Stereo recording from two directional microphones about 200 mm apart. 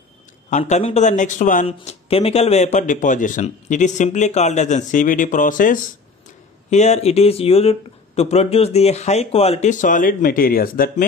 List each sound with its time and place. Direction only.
0.5 s speech: 35° left (ahead or behind)